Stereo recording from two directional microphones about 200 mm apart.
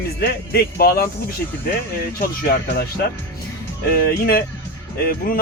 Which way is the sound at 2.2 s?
50° left (ahead or behind).